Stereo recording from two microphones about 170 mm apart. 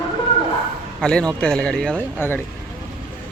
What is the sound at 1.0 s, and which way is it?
A man's voice, 5° left (ahead or behind).